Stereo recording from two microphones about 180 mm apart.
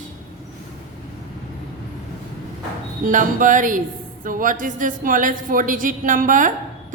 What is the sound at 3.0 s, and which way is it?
A woman's voice, 45° right (ahead or behind).